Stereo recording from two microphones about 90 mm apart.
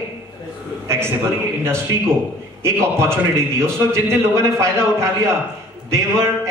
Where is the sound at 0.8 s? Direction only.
30° right (ahead or behind).